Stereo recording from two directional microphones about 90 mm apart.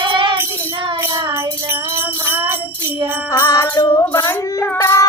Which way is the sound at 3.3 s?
40° left (ahead or behind).